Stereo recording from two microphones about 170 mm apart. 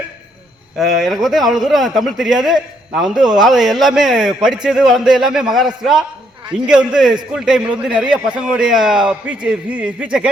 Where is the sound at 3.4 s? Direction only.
Centre (ahead or behind).